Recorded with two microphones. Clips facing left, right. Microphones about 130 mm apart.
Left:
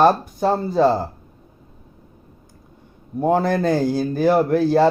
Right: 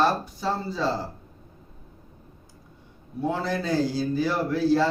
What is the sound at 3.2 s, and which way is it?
Speech, 50° left (ahead or behind).